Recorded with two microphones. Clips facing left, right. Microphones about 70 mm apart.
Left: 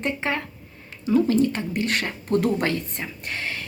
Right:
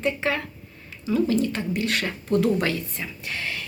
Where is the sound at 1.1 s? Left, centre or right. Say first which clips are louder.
Left 3 dB; left.